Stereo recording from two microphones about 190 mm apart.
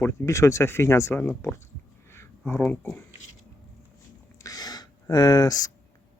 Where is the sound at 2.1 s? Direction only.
10° left (ahead or behind).